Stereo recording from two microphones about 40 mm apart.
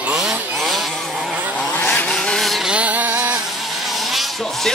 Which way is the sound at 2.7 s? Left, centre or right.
Right.